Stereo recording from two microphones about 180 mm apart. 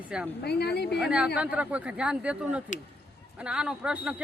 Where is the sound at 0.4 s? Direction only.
65° left (ahead or behind).